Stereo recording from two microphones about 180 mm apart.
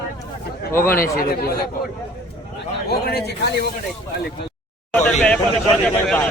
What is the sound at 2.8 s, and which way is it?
Speech, 60° left (ahead or behind).